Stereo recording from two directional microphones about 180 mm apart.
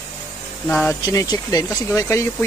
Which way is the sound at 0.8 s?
20° left (ahead or behind).